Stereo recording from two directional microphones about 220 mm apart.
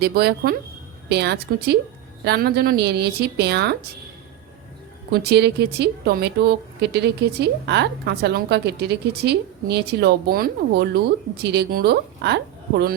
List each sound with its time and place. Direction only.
0.0 s speech: 45° right (ahead or behind)
5.1 s speech: 50° right (ahead or behind)